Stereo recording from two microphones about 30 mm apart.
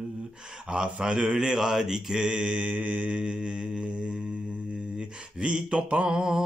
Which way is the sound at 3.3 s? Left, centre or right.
Right.